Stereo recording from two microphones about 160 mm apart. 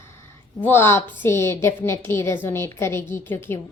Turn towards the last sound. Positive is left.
turn(degrees=15)  # may be behind; listen again after turning